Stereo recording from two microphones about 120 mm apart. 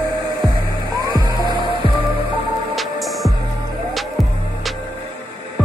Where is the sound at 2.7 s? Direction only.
Centre (ahead or behind).